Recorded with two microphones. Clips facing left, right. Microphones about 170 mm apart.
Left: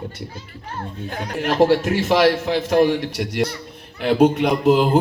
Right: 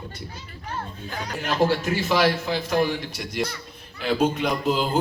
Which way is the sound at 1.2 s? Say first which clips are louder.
Left 6 dB; 60° left (ahead or behind).